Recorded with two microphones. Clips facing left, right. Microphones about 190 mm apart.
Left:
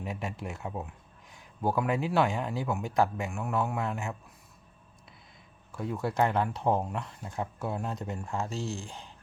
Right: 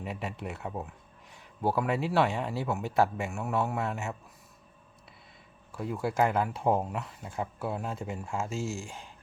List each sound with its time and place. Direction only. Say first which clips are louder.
0.0 s speech: even; centre (ahead or behind)
5.7 s speech: even; 5° right (ahead or behind)
8.4 s speech: right 1 dB; 35° left (ahead or behind)